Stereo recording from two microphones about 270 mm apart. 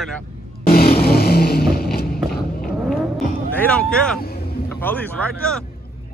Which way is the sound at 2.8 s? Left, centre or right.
Centre.